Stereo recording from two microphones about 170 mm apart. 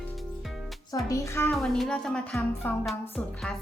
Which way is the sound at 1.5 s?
Centre (ahead or behind).